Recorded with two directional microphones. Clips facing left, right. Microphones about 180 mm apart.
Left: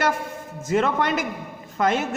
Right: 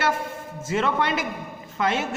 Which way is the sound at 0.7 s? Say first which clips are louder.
Left 2 dB; 45° left (ahead or behind).